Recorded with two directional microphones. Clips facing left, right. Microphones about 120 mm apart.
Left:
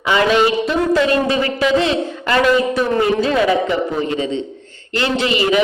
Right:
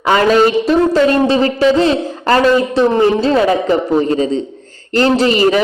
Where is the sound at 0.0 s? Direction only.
40° right (ahead or behind).